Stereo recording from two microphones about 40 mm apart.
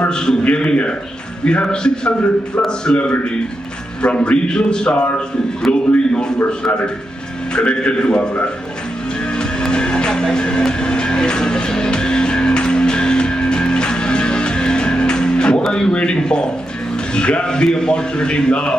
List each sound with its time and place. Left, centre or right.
0.0 s a man's voice: left
9.4 s music: left
15.6 s a man's voice: centre